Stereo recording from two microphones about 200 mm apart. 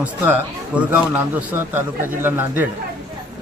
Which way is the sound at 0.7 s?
10° right (ahead or behind).